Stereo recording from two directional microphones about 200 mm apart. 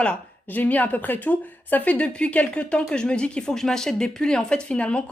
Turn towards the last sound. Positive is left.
turn(degrees=5)  # may be behind; listen again after turning